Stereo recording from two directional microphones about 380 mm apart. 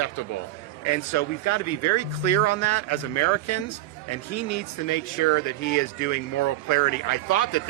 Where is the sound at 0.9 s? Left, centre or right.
Left.